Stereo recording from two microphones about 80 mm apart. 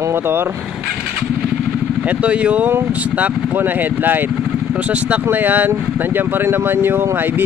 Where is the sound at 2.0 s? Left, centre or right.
Centre.